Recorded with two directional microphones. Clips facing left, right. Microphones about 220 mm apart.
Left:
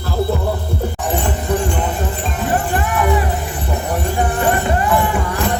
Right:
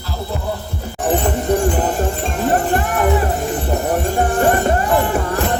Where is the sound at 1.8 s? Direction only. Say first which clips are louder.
Right 3 dB; 45° right (ahead or behind).